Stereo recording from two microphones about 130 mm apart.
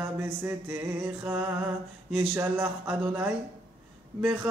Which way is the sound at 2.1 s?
15° right (ahead or behind).